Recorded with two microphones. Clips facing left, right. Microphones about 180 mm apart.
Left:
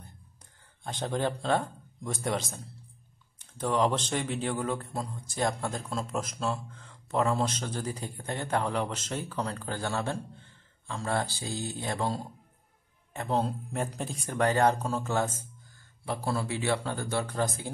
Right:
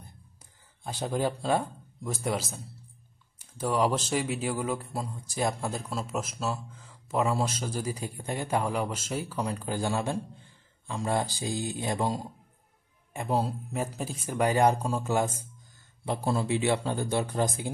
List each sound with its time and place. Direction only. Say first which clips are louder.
0.8 s a man's voice: right 1 dB; 5° right (ahead or behind)